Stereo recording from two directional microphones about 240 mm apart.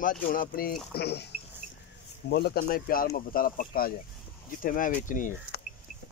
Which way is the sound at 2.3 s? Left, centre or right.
Left.